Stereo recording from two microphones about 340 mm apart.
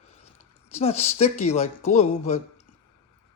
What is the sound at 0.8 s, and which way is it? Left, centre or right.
Speech, centre.